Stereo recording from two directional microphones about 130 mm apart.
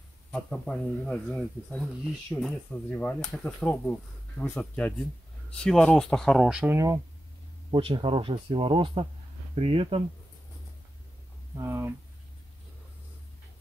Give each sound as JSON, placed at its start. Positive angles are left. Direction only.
{"t": 0.3, "sound": "speech", "side_deg": 10}
{"t": 6.6, "sound": "speech", "side_deg": -20}
{"t": 7.7, "sound": "speech", "side_deg": -40}
{"t": 11.5, "sound": "speech", "side_deg": -20}